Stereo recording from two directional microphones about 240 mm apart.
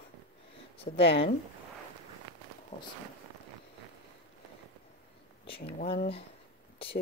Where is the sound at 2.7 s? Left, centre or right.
Left.